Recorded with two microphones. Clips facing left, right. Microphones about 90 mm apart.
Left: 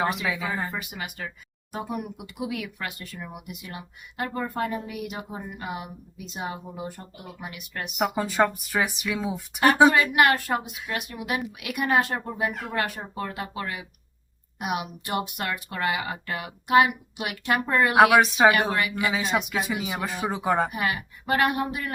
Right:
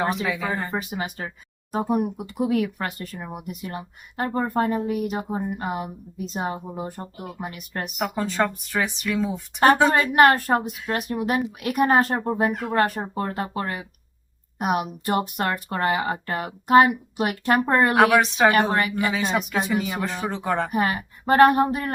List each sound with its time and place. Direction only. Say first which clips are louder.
0.3 s a woman's voice: right 2 dB; centre (ahead or behind)
0.7 s speech: right 6 dB; 35° right (ahead or behind)
7.9 s speech: left 1 dB; 5° left (ahead or behind)
9.9 s speech: right 4 dB; 35° right (ahead or behind)
17.9 s a woman's voice: left 4 dB; 5° left (ahead or behind)
18.7 s speech: right 3 dB; 40° right (ahead or behind)
19.1 s a woman's voice: right 2 dB; centre (ahead or behind)
20.7 s speech: right 4 dB; 40° right (ahead or behind)